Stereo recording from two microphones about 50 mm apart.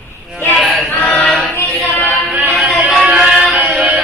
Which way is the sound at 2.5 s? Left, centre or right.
Centre.